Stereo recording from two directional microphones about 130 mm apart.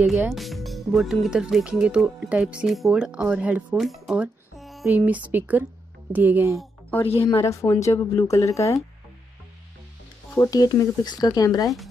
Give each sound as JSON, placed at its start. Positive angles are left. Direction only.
{"t": 0.3, "sound": "speech", "side_deg": 0}
{"t": 4.6, "sound": "a sound", "side_deg": 0}
{"t": 4.8, "sound": "speech", "side_deg": -15}
{"t": 7.2, "sound": "speech", "side_deg": 25}
{"t": 10.3, "sound": "speech", "side_deg": 25}